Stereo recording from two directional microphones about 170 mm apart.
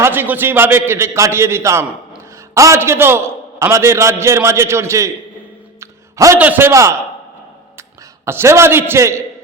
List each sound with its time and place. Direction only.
0.0 s a man's voice: 10° right (ahead or behind)